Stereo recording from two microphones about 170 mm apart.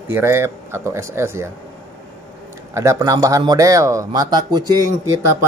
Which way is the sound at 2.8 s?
15° right (ahead or behind).